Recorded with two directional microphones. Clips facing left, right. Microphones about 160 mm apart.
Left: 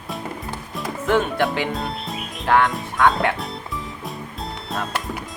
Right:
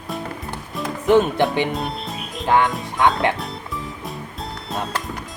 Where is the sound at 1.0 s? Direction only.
20° right (ahead or behind).